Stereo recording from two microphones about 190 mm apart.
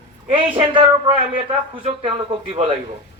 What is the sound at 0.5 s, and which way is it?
A man's voice, 25° right (ahead or behind).